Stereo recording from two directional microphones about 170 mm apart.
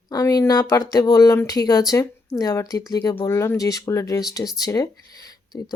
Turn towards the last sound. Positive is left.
turn(degrees=20)  # may be behind; listen again after turning